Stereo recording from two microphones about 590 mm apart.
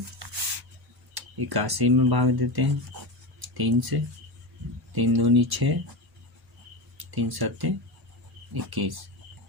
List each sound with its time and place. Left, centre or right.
1.1 s speech: right
6.9 s speech: right